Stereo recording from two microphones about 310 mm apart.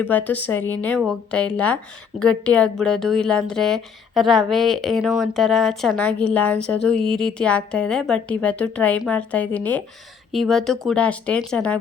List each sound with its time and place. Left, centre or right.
0.0 s speech: centre